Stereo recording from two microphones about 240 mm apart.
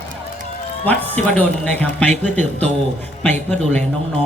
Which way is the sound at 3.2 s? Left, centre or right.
Centre.